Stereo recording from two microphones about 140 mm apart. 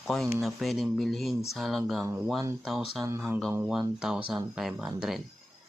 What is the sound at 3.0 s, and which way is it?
Speech, 20° right (ahead or behind).